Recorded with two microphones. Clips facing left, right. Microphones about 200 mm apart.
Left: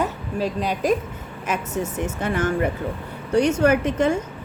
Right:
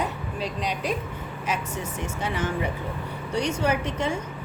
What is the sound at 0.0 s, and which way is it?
A woman's voice, 45° left (ahead or behind).